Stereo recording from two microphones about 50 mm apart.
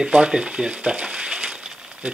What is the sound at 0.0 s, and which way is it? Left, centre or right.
Speech, centre.